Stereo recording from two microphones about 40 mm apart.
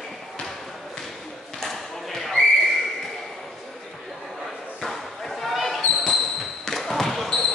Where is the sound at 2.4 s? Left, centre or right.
Left.